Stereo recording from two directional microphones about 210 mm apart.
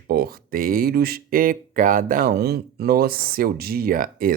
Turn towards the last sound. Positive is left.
turn(degrees=-40)  # may be behind; listen again after turning